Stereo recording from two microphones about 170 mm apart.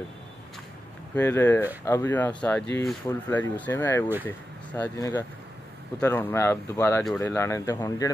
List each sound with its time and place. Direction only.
1.1 s speech: 15° left (ahead or behind)